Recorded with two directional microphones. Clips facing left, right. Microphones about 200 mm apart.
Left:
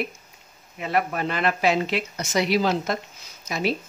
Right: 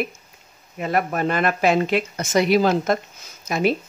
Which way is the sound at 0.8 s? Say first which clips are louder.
Right 3 dB; 45° right (ahead or behind).